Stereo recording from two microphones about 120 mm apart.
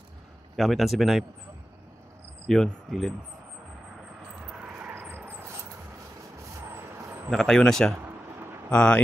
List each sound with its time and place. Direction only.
0.6 s speech: centre (ahead or behind)
2.4 s speech: 5° left (ahead or behind)
4.5 s vehicle: 10° right (ahead or behind)
6.7 s vehicle: 25° right (ahead or behind)
7.2 s speech: 5° left (ahead or behind)